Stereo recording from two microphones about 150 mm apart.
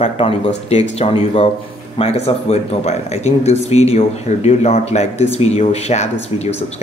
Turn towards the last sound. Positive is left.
turn(degrees=45)  # may be behind; listen again after turning